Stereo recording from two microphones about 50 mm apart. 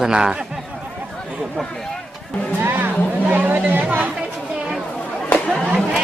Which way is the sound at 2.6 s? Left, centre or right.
Right.